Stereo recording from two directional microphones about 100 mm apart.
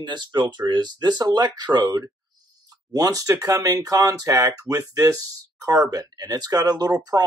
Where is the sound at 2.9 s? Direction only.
35° right (ahead or behind).